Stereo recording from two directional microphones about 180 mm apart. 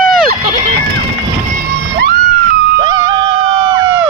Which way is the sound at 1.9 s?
55° right (ahead or behind).